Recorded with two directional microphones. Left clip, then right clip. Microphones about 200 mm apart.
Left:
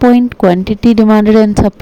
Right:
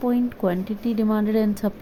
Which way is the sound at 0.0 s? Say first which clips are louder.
Left 15 dB; 40° left (ahead or behind).